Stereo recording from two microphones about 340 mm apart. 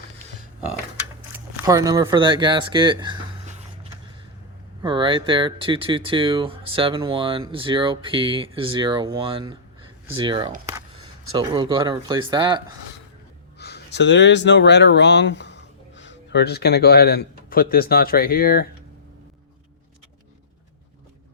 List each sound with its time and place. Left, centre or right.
1.5 s speech: centre
4.8 s speech: centre
13.6 s speech: left